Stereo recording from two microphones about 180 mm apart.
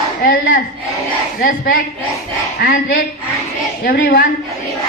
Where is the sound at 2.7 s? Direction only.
55° left (ahead or behind).